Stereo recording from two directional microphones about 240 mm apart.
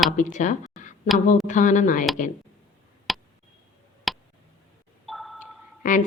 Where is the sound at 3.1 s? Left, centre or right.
Centre.